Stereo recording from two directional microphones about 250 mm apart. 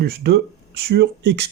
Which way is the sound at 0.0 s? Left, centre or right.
Right.